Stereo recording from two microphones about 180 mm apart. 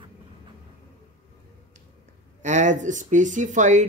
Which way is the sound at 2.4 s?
40° right (ahead or behind).